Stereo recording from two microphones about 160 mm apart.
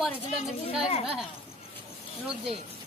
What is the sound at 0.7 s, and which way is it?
Speech, 40° left (ahead or behind).